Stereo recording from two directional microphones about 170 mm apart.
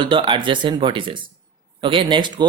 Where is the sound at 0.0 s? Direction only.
30° right (ahead or behind).